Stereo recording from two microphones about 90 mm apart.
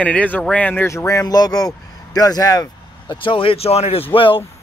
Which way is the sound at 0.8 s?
35° left (ahead or behind).